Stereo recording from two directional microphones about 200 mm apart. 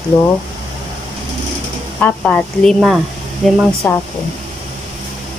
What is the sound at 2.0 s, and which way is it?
Speech, 10° left (ahead or behind).